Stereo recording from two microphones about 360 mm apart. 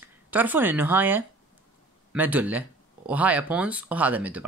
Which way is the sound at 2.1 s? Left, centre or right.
Centre.